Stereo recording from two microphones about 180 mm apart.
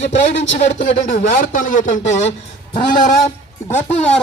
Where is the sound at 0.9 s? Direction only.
40° left (ahead or behind).